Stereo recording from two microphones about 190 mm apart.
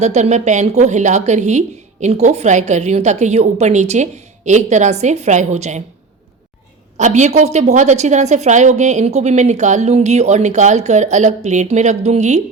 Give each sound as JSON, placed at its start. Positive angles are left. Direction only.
{"t": 0.0, "sound": "a woman's voice", "side_deg": -35}
{"t": 6.9, "sound": "a woman's voice", "side_deg": -40}